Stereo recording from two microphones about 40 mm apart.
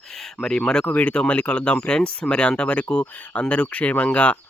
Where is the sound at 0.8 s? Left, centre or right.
Left.